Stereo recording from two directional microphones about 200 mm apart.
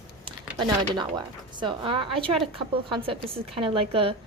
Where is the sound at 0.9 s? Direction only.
20° right (ahead or behind).